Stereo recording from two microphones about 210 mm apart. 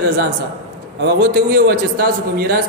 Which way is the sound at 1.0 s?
50° right (ahead or behind).